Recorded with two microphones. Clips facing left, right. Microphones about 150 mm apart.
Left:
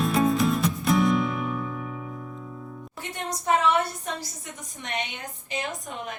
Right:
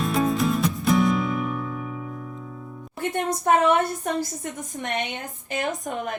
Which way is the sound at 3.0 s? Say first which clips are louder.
Right 9 dB; 55° right (ahead or behind).